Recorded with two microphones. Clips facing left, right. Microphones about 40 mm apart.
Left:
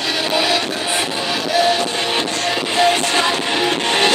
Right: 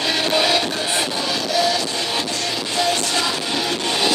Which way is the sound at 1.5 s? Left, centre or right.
Left.